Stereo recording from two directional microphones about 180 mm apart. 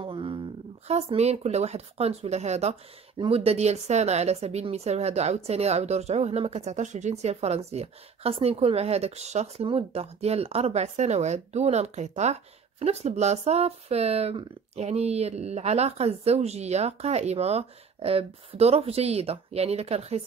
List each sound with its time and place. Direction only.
0.0 s speech: 30° right (ahead or behind)